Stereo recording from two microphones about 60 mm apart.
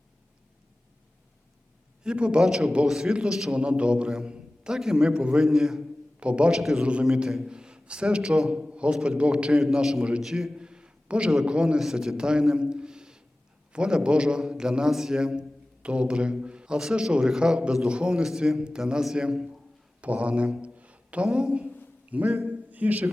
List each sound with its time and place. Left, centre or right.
2.0 s a man's voice: centre
2.5 s a man's voice: centre
3.5 s a man's voice: centre
6.5 s a man's voice: centre
6.8 s a man's voice: centre
7.1 s a man's voice: centre
9.5 s a man's voice: centre
20.0 s a sound: right
21.3 s a man's voice: centre
22.4 s a sound: right